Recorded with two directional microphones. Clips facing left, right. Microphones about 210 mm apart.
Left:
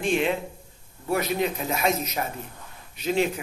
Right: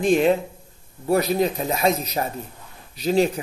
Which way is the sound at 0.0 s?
40° right (ahead or behind).